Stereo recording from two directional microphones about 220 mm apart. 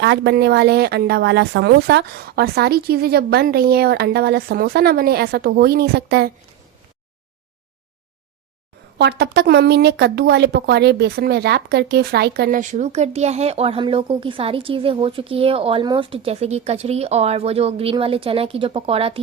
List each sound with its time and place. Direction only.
0.0 s speech: 50° right (ahead or behind)
9.0 s speech: 50° right (ahead or behind); by 19.2 s 25° right (ahead or behind)